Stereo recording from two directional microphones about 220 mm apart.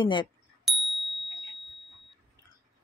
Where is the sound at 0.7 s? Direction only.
Centre (ahead or behind).